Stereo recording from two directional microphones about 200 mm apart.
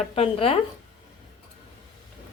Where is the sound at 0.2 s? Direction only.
30° left (ahead or behind).